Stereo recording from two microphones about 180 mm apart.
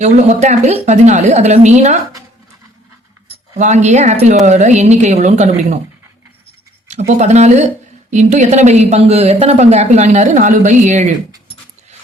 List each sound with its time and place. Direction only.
0.0 s speech: 40° right (ahead or behind)
3.2 s speech: 40° right (ahead or behind)
7.2 s speech: 40° right (ahead or behind)